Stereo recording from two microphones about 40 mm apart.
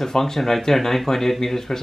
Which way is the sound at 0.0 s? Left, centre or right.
Centre.